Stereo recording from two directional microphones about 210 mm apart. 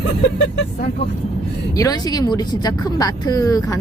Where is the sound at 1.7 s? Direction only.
15° left (ahead or behind).